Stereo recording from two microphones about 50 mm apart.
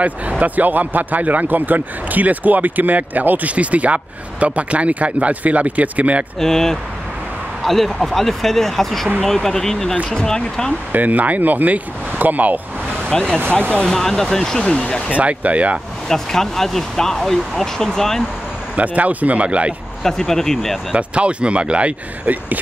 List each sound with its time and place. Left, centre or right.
0.0 s speech: right
6.4 s speech: centre
10.9 s speech: right
13.1 s speech: centre
13.4 s speech: right
13.8 s speech: centre
15.1 s speech: right
16.1 s speech: centre
18.8 s speech: right
20.0 s speech: centre
20.9 s speech: right